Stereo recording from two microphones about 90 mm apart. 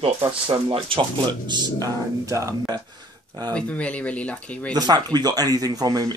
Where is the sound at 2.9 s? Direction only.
50° right (ahead or behind).